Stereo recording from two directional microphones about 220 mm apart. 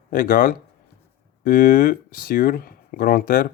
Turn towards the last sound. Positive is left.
turn(degrees=40)  # may be behind; listen again after turning